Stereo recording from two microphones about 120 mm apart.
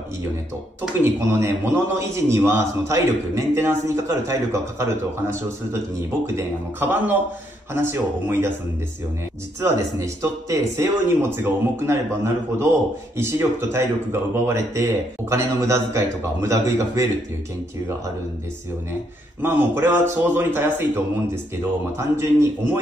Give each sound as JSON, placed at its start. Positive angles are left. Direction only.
{"t": 1.0, "sound": "a man's voice", "side_deg": -20}
{"t": 9.6, "sound": "a man's voice", "side_deg": -25}
{"t": 19.4, "sound": "a man's voice", "side_deg": -15}